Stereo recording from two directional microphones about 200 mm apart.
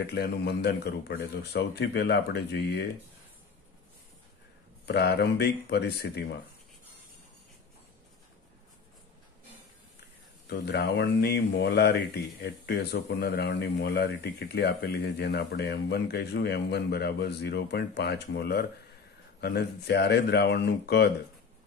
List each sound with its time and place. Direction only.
0.0 s speech: 55° left (ahead or behind)
4.8 s speech: 55° left (ahead or behind)
10.4 s speech: 55° left (ahead or behind)